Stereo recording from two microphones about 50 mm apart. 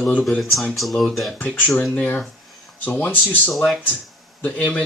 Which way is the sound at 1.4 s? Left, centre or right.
Left.